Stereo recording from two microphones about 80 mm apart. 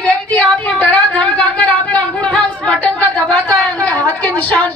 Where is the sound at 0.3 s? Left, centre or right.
Centre.